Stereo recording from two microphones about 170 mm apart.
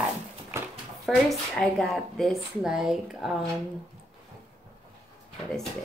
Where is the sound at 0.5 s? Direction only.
15° right (ahead or behind).